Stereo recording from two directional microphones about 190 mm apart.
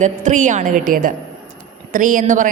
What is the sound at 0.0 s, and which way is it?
A woman's voice, 40° right (ahead or behind).